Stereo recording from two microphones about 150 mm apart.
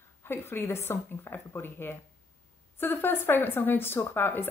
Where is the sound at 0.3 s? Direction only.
15° left (ahead or behind).